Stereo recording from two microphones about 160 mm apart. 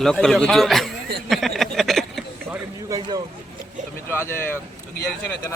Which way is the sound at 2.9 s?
25° right (ahead or behind).